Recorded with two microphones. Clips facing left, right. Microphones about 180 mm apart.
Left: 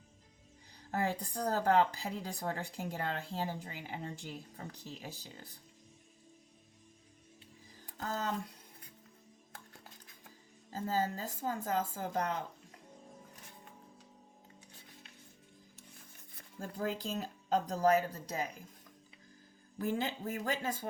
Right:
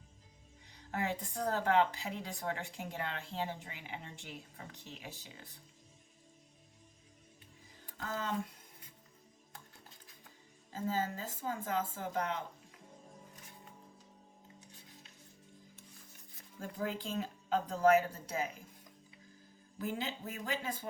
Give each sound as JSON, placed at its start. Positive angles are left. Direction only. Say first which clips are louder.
{"t": 0.9, "sound": "speech", "louder": "left 2 dB", "side_deg": 35}
{"t": 7.9, "sound": "speech", "louder": "left 2 dB", "side_deg": 40}
{"t": 10.7, "sound": "speech", "louder": "left 2 dB", "side_deg": 40}
{"t": 16.6, "sound": "speech", "louder": "left 1 dB", "side_deg": 40}
{"t": 19.8, "sound": "speech", "louder": "left 4 dB", "side_deg": 50}